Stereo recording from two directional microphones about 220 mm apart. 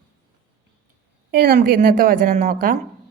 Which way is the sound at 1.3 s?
45° right (ahead or behind).